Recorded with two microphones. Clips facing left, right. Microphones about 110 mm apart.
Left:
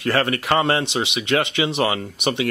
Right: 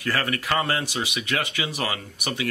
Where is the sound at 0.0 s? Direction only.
25° left (ahead or behind).